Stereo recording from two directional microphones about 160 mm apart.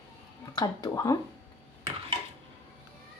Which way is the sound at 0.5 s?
25° left (ahead or behind).